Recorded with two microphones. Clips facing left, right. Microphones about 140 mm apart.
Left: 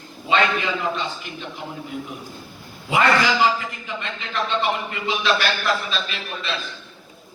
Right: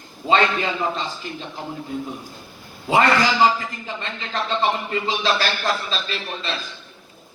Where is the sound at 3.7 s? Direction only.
35° right (ahead or behind).